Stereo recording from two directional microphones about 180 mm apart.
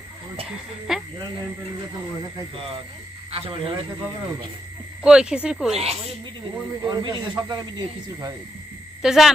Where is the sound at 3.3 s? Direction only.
30° right (ahead or behind).